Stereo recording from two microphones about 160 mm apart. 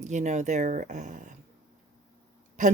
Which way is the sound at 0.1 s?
50° right (ahead or behind).